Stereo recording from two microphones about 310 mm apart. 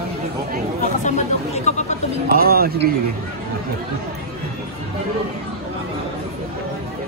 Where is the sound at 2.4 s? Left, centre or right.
Right.